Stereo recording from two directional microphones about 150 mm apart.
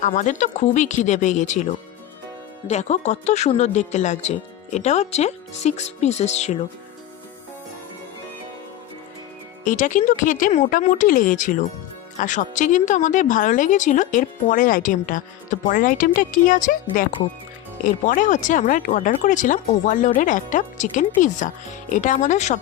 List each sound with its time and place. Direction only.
0.0 s speech: 55° left (ahead or behind)
2.6 s speech: 50° left (ahead or behind)
9.6 s speech: 60° left (ahead or behind)